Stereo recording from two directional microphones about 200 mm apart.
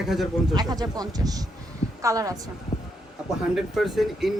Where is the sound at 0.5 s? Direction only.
20° right (ahead or behind).